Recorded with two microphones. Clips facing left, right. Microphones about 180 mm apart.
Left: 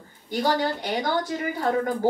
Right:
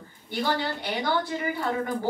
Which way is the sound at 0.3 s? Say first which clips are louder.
Left 4 dB; 40° left (ahead or behind).